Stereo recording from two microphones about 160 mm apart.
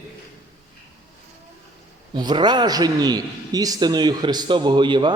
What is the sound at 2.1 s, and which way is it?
A man's voice, 25° right (ahead or behind).